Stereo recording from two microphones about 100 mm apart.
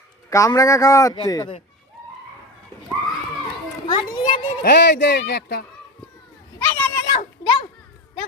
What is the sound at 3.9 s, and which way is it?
Children playing, 50° left (ahead or behind).